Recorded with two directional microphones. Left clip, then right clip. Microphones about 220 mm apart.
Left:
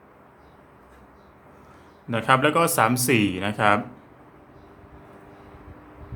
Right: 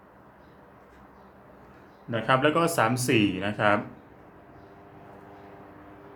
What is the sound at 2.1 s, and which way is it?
Speech, 25° left (ahead or behind).